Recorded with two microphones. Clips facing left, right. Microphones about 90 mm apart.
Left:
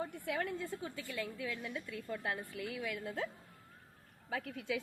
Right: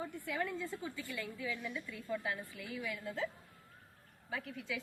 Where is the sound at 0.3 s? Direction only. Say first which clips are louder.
Even; 60° left (ahead or behind).